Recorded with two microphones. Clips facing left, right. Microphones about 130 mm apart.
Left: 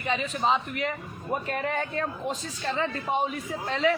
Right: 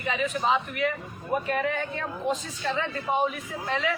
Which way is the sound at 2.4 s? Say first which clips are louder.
Even; 35° left (ahead or behind).